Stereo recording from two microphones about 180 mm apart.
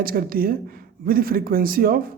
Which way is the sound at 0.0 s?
55° right (ahead or behind).